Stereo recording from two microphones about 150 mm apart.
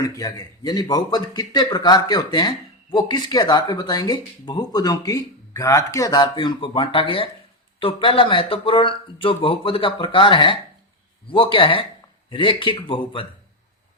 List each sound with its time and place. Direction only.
0.0 s a man's voice: 25° left (ahead or behind)